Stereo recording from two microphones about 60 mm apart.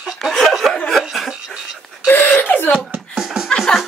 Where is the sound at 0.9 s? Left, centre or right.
Centre.